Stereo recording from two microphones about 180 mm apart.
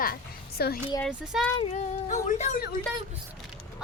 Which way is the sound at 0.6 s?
60° left (ahead or behind).